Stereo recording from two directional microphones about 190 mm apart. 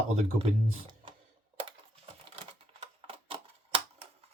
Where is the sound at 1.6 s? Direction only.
30° right (ahead or behind).